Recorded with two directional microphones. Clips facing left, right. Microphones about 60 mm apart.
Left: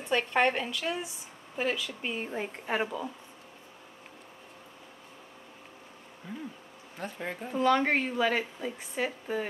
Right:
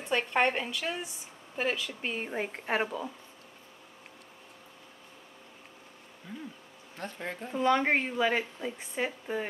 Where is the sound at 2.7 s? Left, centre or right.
Centre.